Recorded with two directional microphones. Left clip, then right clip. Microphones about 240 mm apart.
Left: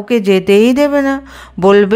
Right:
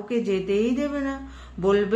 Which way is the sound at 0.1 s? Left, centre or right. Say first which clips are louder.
Left 14 dB; left.